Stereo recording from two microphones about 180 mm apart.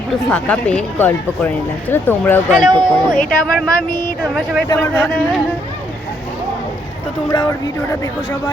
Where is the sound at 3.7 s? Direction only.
25° right (ahead or behind).